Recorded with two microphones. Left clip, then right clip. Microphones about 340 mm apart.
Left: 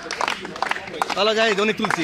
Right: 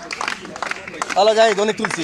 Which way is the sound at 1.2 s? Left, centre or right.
Right.